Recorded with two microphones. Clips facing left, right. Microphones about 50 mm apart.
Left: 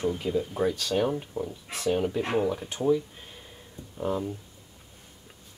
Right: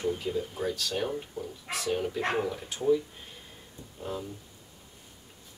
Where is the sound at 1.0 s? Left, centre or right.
Centre.